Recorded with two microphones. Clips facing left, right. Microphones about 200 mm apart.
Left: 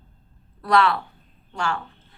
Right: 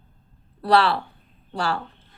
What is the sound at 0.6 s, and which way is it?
A woman's voice, 30° right (ahead or behind).